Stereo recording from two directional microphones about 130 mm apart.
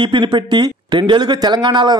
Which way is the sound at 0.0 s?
35° right (ahead or behind).